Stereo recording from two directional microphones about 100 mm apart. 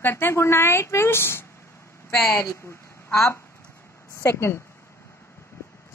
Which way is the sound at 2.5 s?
30° left (ahead or behind).